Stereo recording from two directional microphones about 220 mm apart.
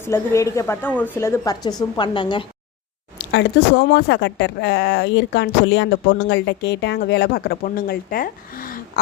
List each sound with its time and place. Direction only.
0.0 s a woman's voice: 15° left (ahead or behind)
3.2 s speech: 50° left (ahead or behind)